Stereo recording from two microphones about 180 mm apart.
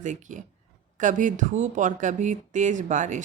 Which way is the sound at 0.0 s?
45° right (ahead or behind).